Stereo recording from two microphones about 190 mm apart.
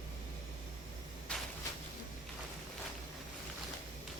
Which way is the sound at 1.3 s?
5° left (ahead or behind).